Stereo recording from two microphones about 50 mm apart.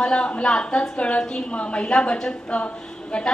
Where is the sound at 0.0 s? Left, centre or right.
Centre.